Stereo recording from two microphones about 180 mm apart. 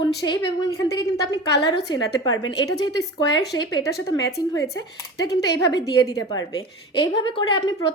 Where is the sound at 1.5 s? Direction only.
65° left (ahead or behind).